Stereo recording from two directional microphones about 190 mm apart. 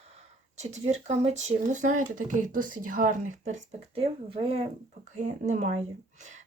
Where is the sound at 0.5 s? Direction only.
35° right (ahead or behind).